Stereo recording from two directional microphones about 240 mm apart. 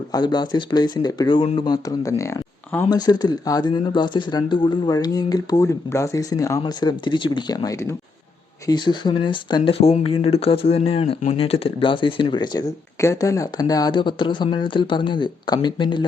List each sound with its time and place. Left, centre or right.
0.1 s speech: centre